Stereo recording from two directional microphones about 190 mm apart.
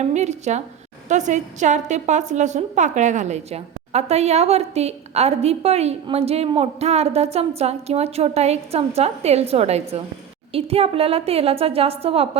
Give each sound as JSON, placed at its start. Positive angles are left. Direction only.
{"t": 0.0, "sound": "a woman's voice", "side_deg": -35}